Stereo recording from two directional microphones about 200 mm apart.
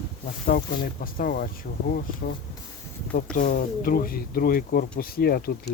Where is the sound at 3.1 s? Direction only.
45° left (ahead or behind).